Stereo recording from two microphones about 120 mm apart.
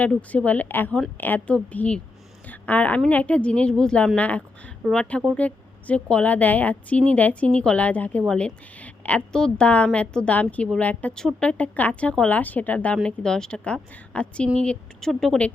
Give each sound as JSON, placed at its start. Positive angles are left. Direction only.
{"t": 0.0, "sound": "a woman's voice", "side_deg": 10}
{"t": 2.5, "sound": "a sound", "side_deg": 10}
{"t": 3.1, "sound": "a woman's voice", "side_deg": 10}